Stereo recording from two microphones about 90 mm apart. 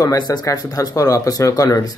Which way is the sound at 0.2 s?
50° left (ahead or behind).